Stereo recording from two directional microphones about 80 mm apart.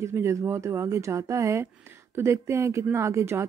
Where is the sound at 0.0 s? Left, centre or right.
Right.